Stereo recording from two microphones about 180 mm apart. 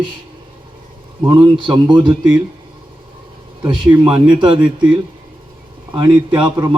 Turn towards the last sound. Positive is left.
turn(degrees=-25)  # may be behind; listen again after turning